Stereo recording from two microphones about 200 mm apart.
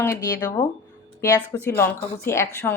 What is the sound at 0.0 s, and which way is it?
A woman's voice, 15° left (ahead or behind).